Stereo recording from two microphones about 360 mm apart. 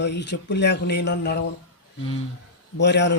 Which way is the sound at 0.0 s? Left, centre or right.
Left.